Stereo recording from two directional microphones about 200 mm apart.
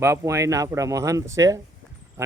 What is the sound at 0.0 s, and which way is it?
Speech, 15° right (ahead or behind).